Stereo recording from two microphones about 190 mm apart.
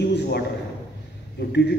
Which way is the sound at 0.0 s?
60° left (ahead or behind).